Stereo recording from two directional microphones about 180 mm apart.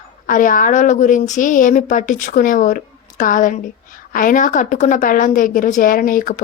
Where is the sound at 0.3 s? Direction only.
50° left (ahead or behind).